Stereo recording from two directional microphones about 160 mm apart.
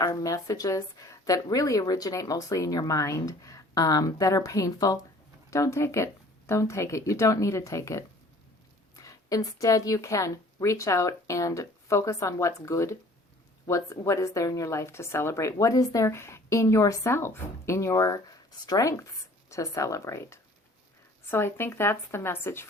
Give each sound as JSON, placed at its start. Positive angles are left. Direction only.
{"t": 0.0, "sound": "a woman's voice", "side_deg": 20}